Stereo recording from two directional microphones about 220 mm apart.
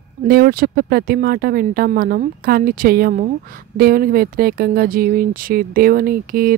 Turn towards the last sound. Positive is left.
turn(degrees=-40)  # may be behind; listen again after turning